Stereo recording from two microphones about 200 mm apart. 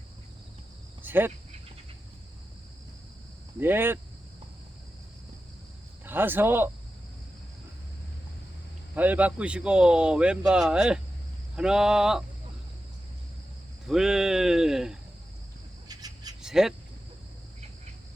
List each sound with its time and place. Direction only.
1.0 s speech: 10° right (ahead or behind)
3.6 s speech: 10° right (ahead or behind)
6.1 s speech: 10° right (ahead or behind)
9.0 s speech: 5° right (ahead or behind)
13.8 s speech: centre (ahead or behind)
15.9 s owl: 20° right (ahead or behind)
16.4 s a sound: centre (ahead or behind)